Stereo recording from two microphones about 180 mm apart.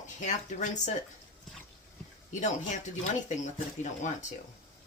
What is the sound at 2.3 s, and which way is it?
Speech, 40° left (ahead or behind).